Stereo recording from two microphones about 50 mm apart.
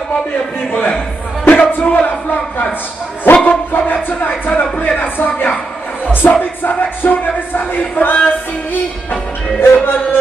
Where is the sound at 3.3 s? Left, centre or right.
Left.